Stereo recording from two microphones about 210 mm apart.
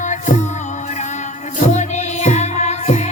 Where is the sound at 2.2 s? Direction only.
35° left (ahead or behind).